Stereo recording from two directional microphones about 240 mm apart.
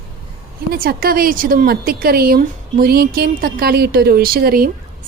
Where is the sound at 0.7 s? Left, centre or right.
Right.